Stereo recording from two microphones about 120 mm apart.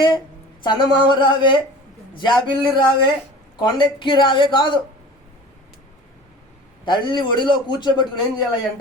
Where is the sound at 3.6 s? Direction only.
40° left (ahead or behind).